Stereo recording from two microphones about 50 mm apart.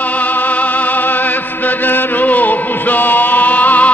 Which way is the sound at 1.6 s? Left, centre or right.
Left.